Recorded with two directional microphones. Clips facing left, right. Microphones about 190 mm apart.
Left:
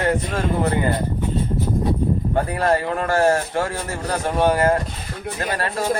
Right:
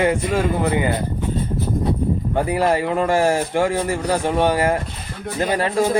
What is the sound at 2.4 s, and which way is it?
Speech, 10° right (ahead or behind).